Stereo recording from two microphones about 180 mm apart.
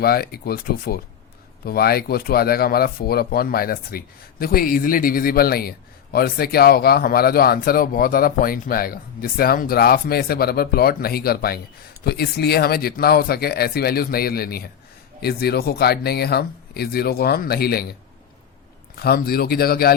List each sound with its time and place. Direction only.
0.0 s a man's voice: 60° left (ahead or behind)
18.9 s a man's voice: 60° left (ahead or behind)